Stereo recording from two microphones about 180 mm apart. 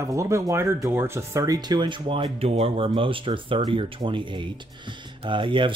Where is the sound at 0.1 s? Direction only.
15° right (ahead or behind).